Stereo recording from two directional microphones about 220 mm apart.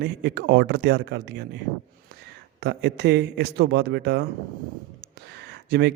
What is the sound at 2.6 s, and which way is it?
A man's voice, 50° right (ahead or behind).